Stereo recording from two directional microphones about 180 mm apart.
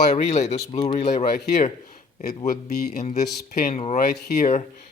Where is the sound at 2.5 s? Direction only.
60° left (ahead or behind).